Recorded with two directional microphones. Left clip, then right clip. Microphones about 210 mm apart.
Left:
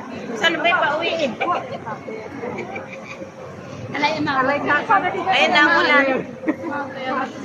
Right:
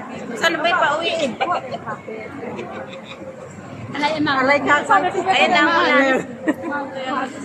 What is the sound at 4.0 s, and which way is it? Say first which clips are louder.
A woman's voice: right 1 dB; 35° right (ahead or behind).